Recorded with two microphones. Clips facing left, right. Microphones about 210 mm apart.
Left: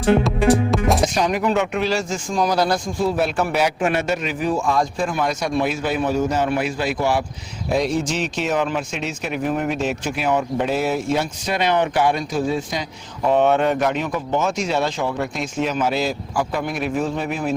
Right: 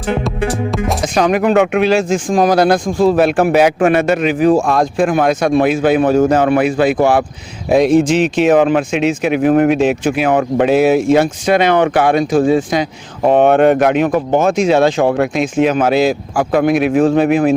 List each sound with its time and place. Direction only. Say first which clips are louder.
0.3 s music: left 1 dB; centre (ahead or behind)
1.0 s speech: right 6 dB; 90° right; by 2.9 s 55° right (ahead or behind)
3.0 s a man's voice: right 10 dB; 90° right
3.5 s speech: right 9 dB; 55° right (ahead or behind)
5.6 s a man's voice: right 9 dB; 90° right
6.1 s speech: right 9 dB; 55° right (ahead or behind)
8.1 s speech: right 11 dB; 75° right (ahead or behind)
13.2 s speech: right 7 dB; 55° right (ahead or behind)
14.6 s speech: right 10 dB; 85° right
15.5 s speech: right 8 dB; 60° right (ahead or behind); by 17.5 s 80° right